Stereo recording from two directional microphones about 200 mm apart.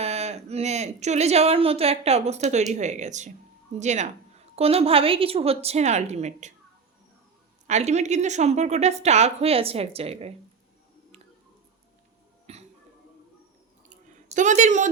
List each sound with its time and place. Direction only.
0.0 s a woman's voice: 30° right (ahead or behind)
7.7 s a woman's voice: 35° right (ahead or behind)
12.5 s a sound: 30° right (ahead or behind)
14.3 s a woman's voice: 35° right (ahead or behind)